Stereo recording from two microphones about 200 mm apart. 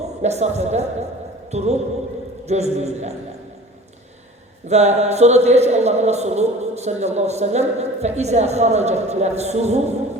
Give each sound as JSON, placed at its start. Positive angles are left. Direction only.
{"t": 0.2, "sound": "a man's voice", "side_deg": -35}
{"t": 4.7, "sound": "a man's voice", "side_deg": -35}